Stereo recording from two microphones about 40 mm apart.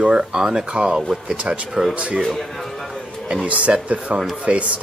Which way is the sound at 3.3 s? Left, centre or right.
Right.